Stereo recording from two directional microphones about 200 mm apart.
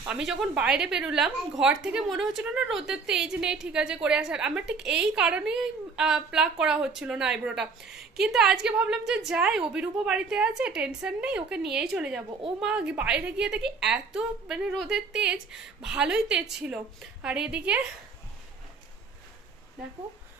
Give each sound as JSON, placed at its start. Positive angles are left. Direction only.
{"t": 0.0, "sound": "a woman's voice", "side_deg": -5}